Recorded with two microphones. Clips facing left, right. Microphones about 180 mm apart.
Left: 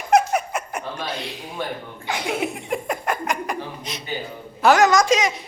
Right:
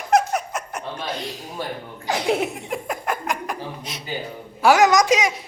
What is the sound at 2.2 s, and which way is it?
A woman's voice, centre (ahead or behind).